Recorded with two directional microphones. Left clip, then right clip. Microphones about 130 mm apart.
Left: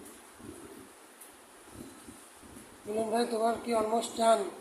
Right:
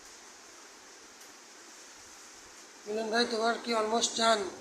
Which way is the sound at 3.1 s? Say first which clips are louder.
Right 1 dB; 20° left (ahead or behind).